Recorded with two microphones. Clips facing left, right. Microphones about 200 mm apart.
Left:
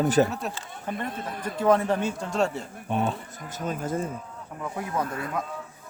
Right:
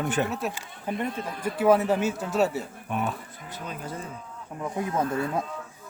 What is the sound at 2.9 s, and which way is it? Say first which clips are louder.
Speech: left 3 dB; 30° left (ahead or behind).